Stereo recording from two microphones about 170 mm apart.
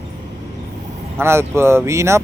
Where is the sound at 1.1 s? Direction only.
15° right (ahead or behind).